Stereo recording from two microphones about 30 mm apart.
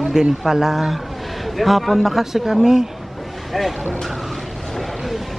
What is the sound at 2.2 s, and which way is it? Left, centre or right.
Speech, centre.